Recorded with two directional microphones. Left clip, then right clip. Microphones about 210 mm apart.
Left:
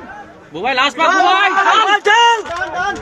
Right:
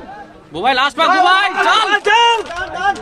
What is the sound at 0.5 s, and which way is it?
A man's voice, 35° right (ahead or behind).